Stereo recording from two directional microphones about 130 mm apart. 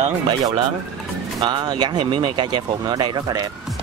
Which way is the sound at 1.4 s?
35° right (ahead or behind).